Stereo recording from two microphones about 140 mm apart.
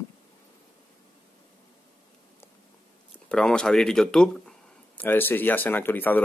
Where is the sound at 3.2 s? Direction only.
5° left (ahead or behind).